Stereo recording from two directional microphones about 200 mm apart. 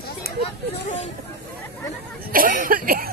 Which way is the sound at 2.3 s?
45° right (ahead or behind).